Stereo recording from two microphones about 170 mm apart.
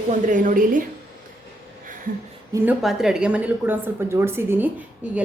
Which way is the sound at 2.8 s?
Centre (ahead or behind).